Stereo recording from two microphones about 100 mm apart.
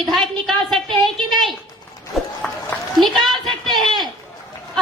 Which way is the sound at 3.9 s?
45° right (ahead or behind).